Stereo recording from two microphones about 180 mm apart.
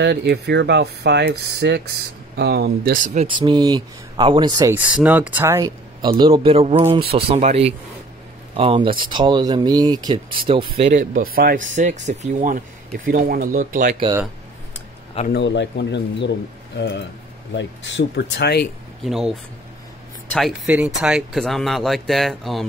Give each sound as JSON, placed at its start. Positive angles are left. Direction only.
{"t": 0.0, "sound": "speech", "side_deg": -70}
{"t": 3.3, "sound": "speech", "side_deg": -25}
{"t": 4.7, "sound": "speech", "side_deg": -10}
{"t": 6.0, "sound": "a man's voice", "side_deg": -25}
{"t": 10.8, "sound": "speech", "side_deg": -45}
{"t": 15.3, "sound": "speech", "side_deg": 80}
{"t": 17.6, "sound": "speech", "side_deg": 85}
{"t": 19.0, "sound": "speech", "side_deg": 0}